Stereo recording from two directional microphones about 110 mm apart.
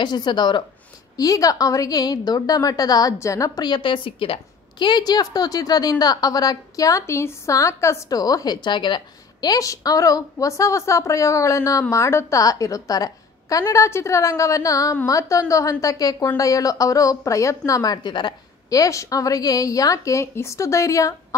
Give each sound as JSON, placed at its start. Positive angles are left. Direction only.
{"t": 0.0, "sound": "speech", "side_deg": 45}
{"t": 1.1, "sound": "a woman's voice", "side_deg": 35}